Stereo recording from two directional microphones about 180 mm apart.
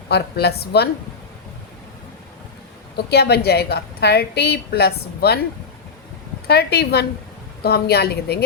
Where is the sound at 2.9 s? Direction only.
65° left (ahead or behind).